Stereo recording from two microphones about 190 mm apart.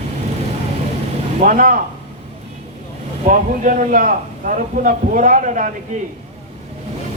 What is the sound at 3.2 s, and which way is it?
A man's voice, 45° right (ahead or behind).